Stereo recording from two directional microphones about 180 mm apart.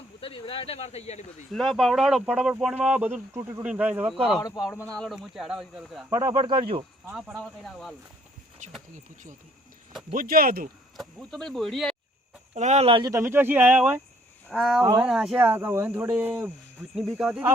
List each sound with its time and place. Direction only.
0.2 s speech: 30° left (ahead or behind)
1.5 s speech: centre (ahead or behind)
4.4 s speech: 20° left (ahead or behind)
4.9 s speech: 5° left (ahead or behind)
6.1 s speech: 20° right (ahead or behind)
7.2 s speech: centre (ahead or behind)
8.6 s speech: 40° right (ahead or behind)
10.1 s speech: 50° right (ahead or behind)
10.9 s speech: centre (ahead or behind)
12.5 s speech: 40° right (ahead or behind)
13.1 s speech: 15° right (ahead or behind)